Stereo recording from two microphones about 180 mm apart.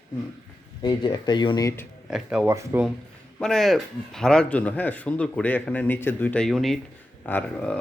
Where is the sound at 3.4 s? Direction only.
Centre (ahead or behind).